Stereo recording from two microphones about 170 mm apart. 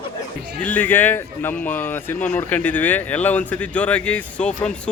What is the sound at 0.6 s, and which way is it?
Speech, 10° left (ahead or behind).